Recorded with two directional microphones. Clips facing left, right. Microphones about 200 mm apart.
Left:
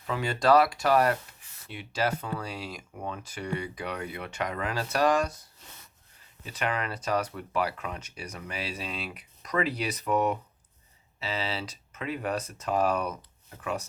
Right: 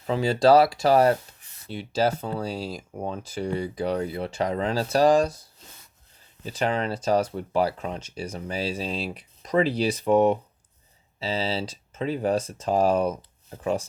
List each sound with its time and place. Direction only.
0.1 s speech: 30° right (ahead or behind)
6.4 s speech: 30° right (ahead or behind)